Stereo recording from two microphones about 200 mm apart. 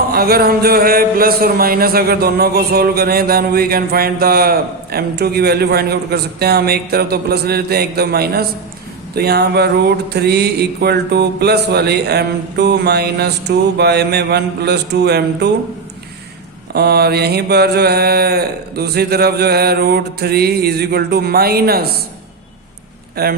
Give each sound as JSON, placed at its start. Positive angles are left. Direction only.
{"t": 0.1, "sound": "speech", "side_deg": -50}
{"t": 9.1, "sound": "a sound", "side_deg": -55}
{"t": 16.7, "sound": "speech", "side_deg": -50}
{"t": 23.2, "sound": "speech", "side_deg": -50}